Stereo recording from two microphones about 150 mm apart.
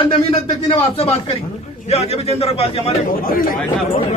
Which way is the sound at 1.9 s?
45° left (ahead or behind).